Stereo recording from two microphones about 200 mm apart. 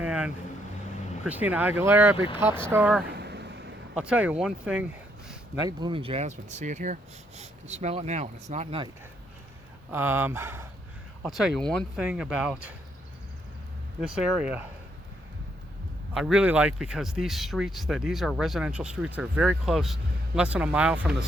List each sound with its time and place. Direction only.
0.0 s vehicle: 5° right (ahead or behind)
1.2 s speech: 10° right (ahead or behind)
2.1 s speech: 25° left (ahead or behind)
2.6 s speech: 10° right (ahead or behind)
3.2 s a sound: 55° right (ahead or behind)
4.0 s speech: 5° right (ahead or behind)
5.6 s speech: 25° right (ahead or behind)
9.9 s speech: 10° right (ahead or behind)
11.2 s speech: centre (ahead or behind)
14.0 s speech: 5° right (ahead or behind)
16.1 s speech: 5° right (ahead or behind)